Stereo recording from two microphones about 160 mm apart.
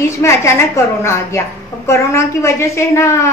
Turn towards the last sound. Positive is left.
turn(degrees=15)  # may be behind; listen again after turning